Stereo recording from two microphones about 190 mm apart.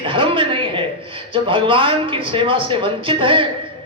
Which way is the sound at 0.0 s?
25° right (ahead or behind).